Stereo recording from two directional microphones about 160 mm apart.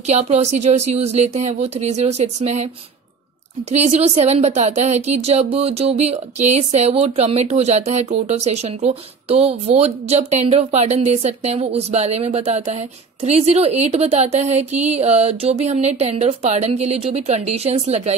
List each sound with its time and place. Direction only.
0.0 s speech: 45° right (ahead or behind)
3.7 s speech: 40° right (ahead or behind)